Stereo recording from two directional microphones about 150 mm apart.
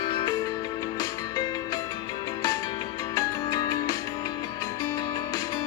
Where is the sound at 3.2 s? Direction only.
25° left (ahead or behind).